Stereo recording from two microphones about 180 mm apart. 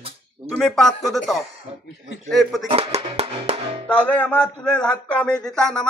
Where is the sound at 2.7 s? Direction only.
30° right (ahead or behind).